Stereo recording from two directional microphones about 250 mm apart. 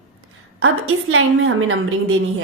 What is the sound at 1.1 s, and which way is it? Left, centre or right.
A woman's voice, right.